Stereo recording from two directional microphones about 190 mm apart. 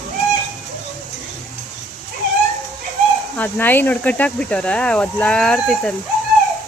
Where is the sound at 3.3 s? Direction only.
10° left (ahead or behind).